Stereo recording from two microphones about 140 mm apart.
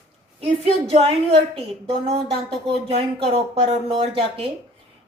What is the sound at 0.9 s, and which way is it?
A woman's voice, 45° right (ahead or behind).